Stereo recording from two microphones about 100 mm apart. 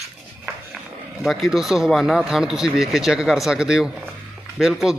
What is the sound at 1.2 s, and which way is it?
Speech, centre (ahead or behind).